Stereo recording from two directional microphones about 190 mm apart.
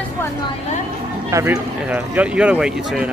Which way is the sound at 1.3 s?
15° right (ahead or behind).